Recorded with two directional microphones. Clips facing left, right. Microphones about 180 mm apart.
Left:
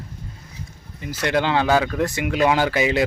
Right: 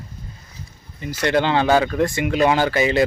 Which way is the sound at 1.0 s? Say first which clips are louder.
Right 2 dB; 5° left (ahead or behind).